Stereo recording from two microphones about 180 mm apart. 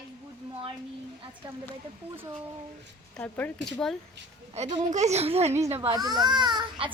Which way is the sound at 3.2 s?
10° left (ahead or behind).